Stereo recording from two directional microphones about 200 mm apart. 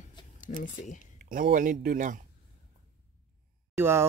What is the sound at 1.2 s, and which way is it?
Speech, 40° right (ahead or behind).